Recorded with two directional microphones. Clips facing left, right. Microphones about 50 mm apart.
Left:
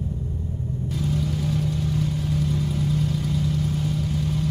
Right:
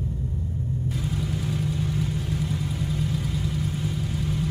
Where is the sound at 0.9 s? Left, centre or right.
Centre.